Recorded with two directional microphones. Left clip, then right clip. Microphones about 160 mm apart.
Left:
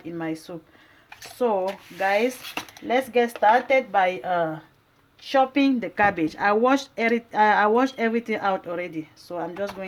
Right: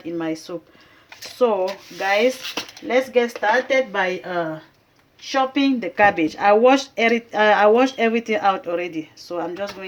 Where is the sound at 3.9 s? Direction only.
45° left (ahead or behind).